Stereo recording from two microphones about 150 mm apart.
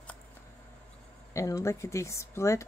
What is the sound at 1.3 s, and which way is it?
Speech, 20° left (ahead or behind).